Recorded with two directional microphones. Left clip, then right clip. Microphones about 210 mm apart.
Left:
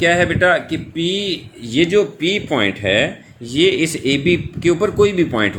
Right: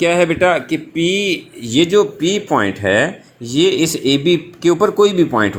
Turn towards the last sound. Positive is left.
turn(degrees=-15)  # may be behind; listen again after turning